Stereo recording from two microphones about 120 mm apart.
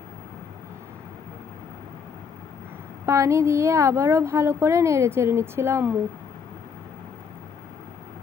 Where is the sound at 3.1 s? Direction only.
25° right (ahead or behind).